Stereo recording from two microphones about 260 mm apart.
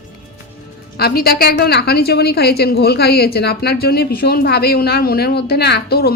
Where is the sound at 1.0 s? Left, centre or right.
Left.